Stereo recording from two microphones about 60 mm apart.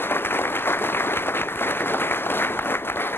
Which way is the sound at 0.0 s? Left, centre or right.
Left.